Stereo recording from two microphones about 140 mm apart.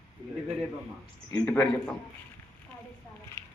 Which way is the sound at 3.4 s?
20° left (ahead or behind).